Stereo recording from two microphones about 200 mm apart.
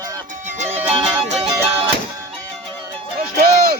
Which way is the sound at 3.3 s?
45° right (ahead or behind).